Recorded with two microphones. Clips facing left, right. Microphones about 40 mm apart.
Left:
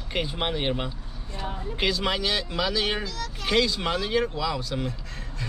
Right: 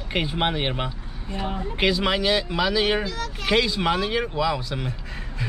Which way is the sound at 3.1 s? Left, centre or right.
Right.